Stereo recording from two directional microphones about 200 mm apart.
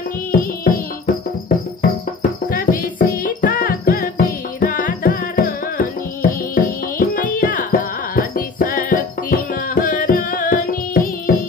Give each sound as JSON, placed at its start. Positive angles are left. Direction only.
{"t": 0.3, "sound": "music", "side_deg": 45}